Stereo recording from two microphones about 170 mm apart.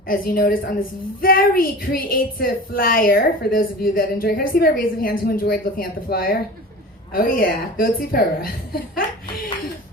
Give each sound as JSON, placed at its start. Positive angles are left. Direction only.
{"t": 0.1, "sound": "a woman's voice", "side_deg": 60}